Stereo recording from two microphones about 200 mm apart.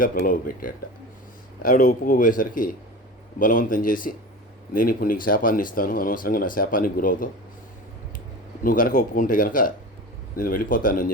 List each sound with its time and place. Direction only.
0.0 s speech: 45° left (ahead or behind)
8.6 s speech: 45° left (ahead or behind)